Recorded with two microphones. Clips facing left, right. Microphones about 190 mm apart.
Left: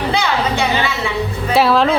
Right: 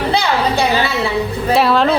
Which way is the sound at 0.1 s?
35° right (ahead or behind).